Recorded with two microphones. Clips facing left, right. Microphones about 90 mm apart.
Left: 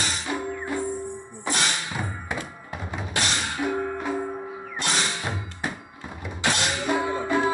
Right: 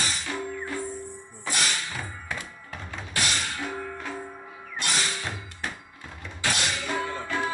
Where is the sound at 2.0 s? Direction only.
20° left (ahead or behind).